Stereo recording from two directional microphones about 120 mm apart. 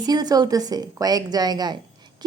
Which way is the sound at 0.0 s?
35° right (ahead or behind).